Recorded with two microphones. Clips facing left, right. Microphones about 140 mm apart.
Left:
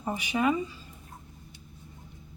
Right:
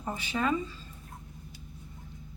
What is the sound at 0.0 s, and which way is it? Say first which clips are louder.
Speech: left 4 dB; 15° left (ahead or behind).